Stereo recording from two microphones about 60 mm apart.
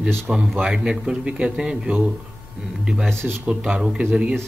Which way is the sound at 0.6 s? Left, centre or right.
Centre.